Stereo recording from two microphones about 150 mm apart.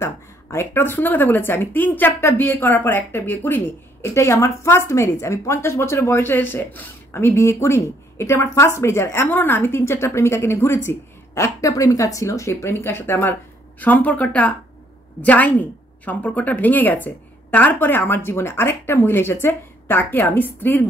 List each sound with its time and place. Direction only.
0.0 s speech: 15° left (ahead or behind)